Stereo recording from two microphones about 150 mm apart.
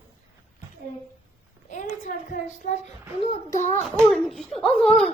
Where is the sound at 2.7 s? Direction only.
55° left (ahead or behind).